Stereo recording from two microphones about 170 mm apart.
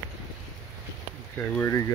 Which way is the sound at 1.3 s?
10° left (ahead or behind).